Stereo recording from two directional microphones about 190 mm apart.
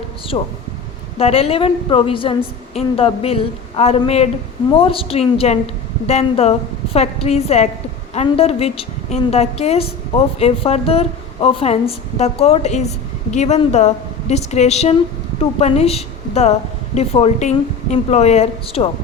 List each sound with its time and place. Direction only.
0.3 s a woman's voice: 25° left (ahead or behind)